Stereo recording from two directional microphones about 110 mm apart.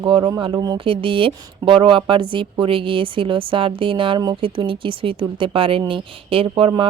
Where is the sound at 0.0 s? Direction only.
50° right (ahead or behind).